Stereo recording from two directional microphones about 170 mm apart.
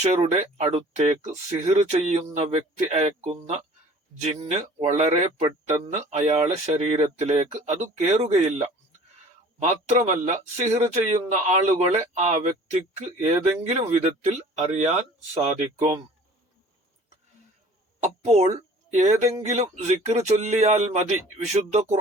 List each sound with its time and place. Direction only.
0.0 s speech: 40° right (ahead or behind)
18.0 s speech: 40° right (ahead or behind)